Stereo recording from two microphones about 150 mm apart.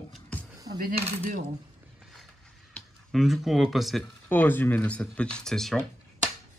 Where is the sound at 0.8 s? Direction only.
70° right (ahead or behind).